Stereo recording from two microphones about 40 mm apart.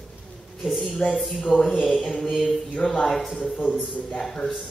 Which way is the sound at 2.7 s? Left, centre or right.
Left.